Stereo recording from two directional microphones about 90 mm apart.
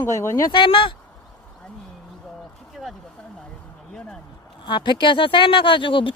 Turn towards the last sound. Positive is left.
turn(degrees=70)  # may be behind; listen again after turning